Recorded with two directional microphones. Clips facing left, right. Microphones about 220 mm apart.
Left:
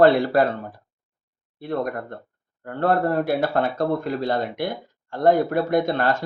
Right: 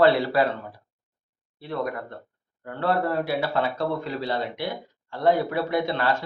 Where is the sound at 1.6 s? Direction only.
50° left (ahead or behind).